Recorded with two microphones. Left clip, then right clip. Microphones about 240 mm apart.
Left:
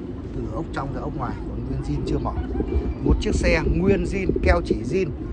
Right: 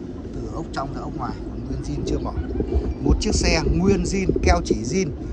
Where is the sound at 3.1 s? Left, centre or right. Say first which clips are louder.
Even; centre.